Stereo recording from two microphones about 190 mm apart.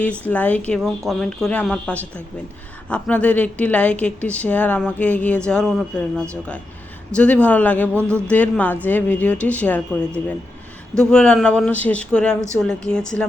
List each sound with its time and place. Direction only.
0.3 s a woman's voice: 10° left (ahead or behind)